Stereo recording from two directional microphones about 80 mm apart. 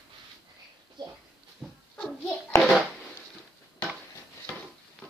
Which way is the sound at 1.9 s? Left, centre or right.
Centre.